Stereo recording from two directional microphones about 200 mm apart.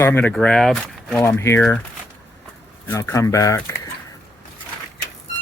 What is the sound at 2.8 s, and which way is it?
Speech, 15° left (ahead or behind).